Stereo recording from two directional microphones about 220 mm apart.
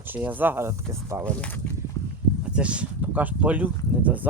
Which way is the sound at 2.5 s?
5° right (ahead or behind).